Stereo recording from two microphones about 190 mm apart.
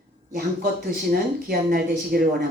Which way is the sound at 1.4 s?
50° right (ahead or behind).